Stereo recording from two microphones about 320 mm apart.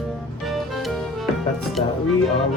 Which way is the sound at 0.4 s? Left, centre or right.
Centre.